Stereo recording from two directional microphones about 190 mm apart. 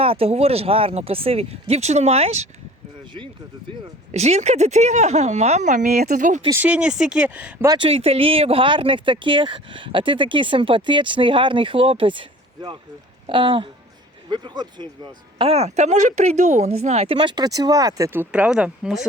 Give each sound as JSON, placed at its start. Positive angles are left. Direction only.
{"t": 0.0, "sound": "speech", "side_deg": -30}
{"t": 4.1, "sound": "speech", "side_deg": -35}
{"t": 6.5, "sound": "speech", "side_deg": -10}
{"t": 7.7, "sound": "speech", "side_deg": -30}
{"t": 13.2, "sound": "speech", "side_deg": -25}